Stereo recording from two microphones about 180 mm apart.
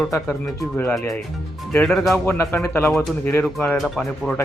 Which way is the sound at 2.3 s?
10° left (ahead or behind).